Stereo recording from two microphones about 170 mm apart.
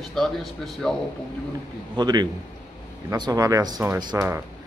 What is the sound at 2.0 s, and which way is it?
Speech, 25° right (ahead or behind).